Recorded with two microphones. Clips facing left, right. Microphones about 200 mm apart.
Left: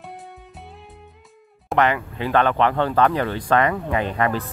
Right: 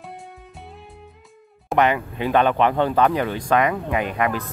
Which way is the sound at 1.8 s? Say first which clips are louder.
Right 1 dB; 15° right (ahead or behind).